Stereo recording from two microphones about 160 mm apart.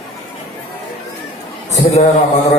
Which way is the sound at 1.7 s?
45° left (ahead or behind).